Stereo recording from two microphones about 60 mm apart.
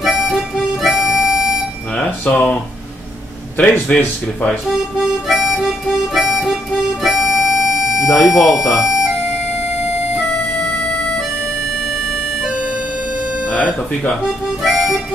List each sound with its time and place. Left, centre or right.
0.0 s harmonica: centre
2.2 s speech: centre
5.3 s harmonica: centre
13.5 s speech: left
14.6 s harmonica: centre